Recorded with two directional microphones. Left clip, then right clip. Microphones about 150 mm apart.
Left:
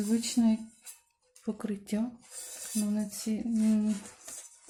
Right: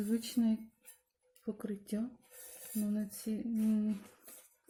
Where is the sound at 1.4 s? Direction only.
35° right (ahead or behind).